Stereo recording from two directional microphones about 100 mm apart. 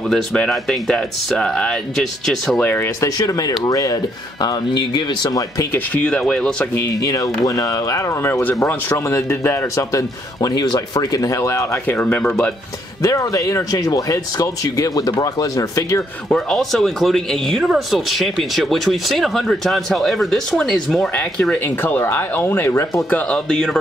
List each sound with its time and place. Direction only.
0.1 s speech: 5° left (ahead or behind)
2.6 s speech: 20° left (ahead or behind)
3.0 s speech: 40° left (ahead or behind)
6.0 s speech: 10° left (ahead or behind)
6.7 s speech: 30° left (ahead or behind)
12.2 s speech: 10° left (ahead or behind)
13.0 s speech: 35° left (ahead or behind)
16.3 s speech: 5° left (ahead or behind); by 23.0 s 25° left (ahead or behind)
23.0 s speech: 15° left (ahead or behind)